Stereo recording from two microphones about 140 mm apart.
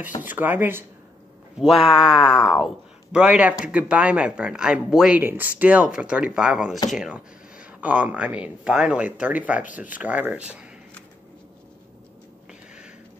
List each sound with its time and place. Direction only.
0.2 s speech: 15° right (ahead or behind)
1.7 s speech: 40° left (ahead or behind)
2.5 s speech: 5° right (ahead or behind)